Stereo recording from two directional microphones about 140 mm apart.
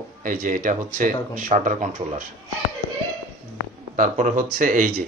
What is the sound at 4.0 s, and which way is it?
Speech, 65° right (ahead or behind).